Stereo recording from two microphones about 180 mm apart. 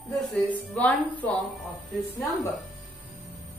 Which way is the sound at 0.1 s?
Centre (ahead or behind).